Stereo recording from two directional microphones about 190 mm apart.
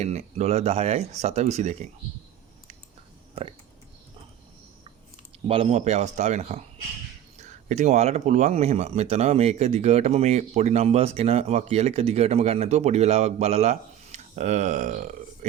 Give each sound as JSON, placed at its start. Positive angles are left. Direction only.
{"t": 0.0, "sound": "speech", "side_deg": -35}
{"t": 5.5, "sound": "speech", "side_deg": -30}
{"t": 7.7, "sound": "speech", "side_deg": -35}